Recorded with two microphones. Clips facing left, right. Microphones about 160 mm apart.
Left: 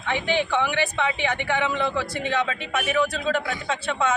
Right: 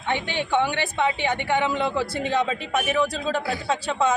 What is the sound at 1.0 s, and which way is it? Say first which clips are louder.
Speech: right 1 dB; 35° right (ahead or behind).